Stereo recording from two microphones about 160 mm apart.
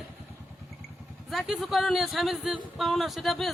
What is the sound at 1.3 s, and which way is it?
A man's voice, centre (ahead or behind).